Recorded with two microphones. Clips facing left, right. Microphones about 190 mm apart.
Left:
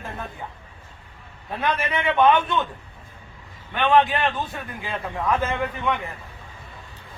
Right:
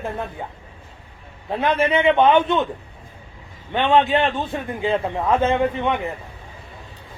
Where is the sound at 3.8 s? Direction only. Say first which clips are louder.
Right 2 dB; 25° right (ahead or behind).